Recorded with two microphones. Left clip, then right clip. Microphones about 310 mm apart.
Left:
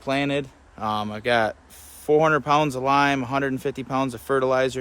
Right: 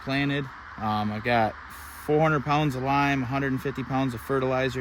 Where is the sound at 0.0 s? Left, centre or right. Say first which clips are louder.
Left 4 dB; centre.